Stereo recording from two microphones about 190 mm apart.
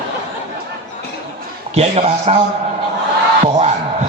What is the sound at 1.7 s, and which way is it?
Speech, 35° right (ahead or behind).